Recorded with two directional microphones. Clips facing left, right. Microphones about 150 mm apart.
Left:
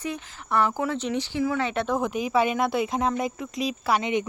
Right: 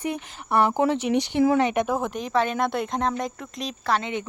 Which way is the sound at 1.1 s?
65° right (ahead or behind).